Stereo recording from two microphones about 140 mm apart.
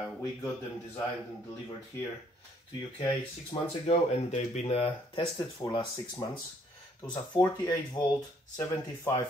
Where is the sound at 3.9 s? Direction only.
55° left (ahead or behind); by 7.5 s 35° left (ahead or behind).